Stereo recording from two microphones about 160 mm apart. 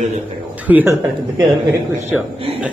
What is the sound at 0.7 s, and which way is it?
Speech, 10° right (ahead or behind).